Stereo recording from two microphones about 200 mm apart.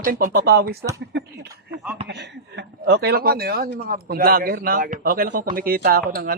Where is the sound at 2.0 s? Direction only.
60° right (ahead or behind).